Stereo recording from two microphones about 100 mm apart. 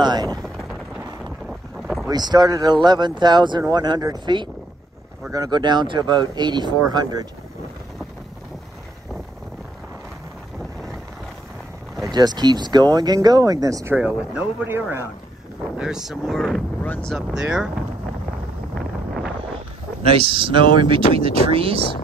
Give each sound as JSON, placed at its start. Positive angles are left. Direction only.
{"t": 0.0, "sound": "a sound", "side_deg": -45}
{"t": 2.0, "sound": "speech", "side_deg": -40}
{"t": 12.1, "sound": "speech", "side_deg": -45}
{"t": 13.9, "sound": "speech", "side_deg": -10}
{"t": 14.7, "sound": "a man's voice", "side_deg": -25}
{"t": 15.8, "sound": "speech", "side_deg": -5}
{"t": 16.8, "sound": "speech", "side_deg": 15}
{"t": 17.1, "sound": "speech", "side_deg": -5}
{"t": 20.0, "sound": "speech", "side_deg": -75}